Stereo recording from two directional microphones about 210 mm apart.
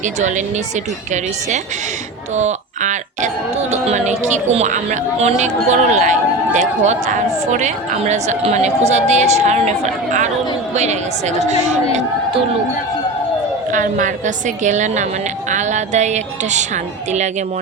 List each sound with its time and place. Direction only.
0.0 s speech: 35° right (ahead or behind)
13.7 s speech: 40° right (ahead or behind)